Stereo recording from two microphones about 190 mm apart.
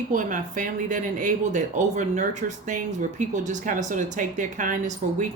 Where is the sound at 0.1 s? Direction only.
45° right (ahead or behind).